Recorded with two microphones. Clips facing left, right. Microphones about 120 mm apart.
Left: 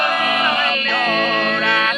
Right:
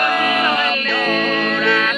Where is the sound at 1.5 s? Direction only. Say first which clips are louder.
Right 1 dB; 15° left (ahead or behind).